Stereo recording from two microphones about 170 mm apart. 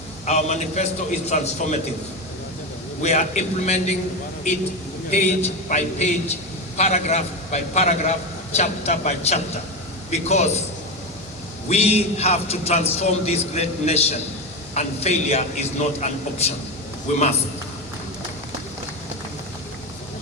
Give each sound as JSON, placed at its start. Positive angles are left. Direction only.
{"t": 0.3, "sound": "a man's voice", "side_deg": 40}
{"t": 3.0, "sound": "a man's voice", "side_deg": 40}
{"t": 5.1, "sound": "a man's voice", "side_deg": 45}
{"t": 11.7, "sound": "a man's voice", "side_deg": 40}